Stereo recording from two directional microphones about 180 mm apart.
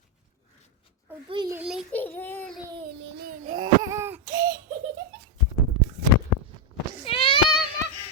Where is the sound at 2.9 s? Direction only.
75° right (ahead or behind).